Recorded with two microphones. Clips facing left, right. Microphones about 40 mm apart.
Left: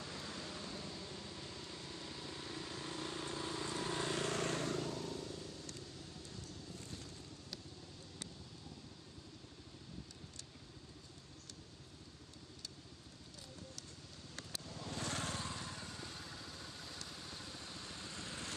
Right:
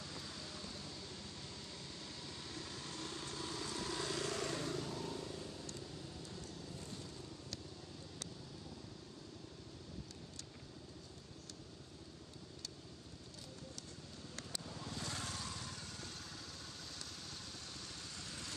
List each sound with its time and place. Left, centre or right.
0.0 s vehicle: left
4.9 s vehicle: centre
14.6 s vehicle: centre
15.0 s vehicle: left